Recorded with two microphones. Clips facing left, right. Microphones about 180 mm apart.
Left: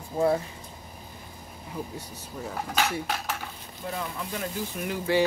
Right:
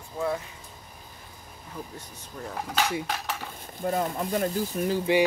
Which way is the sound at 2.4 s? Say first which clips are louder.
Even; 5° left (ahead or behind).